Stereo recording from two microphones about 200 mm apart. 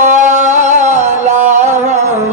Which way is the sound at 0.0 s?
35° right (ahead or behind).